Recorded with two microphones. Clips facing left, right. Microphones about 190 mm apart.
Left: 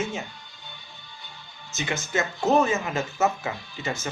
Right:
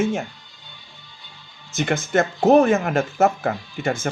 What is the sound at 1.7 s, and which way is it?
Speech, 55° right (ahead or behind).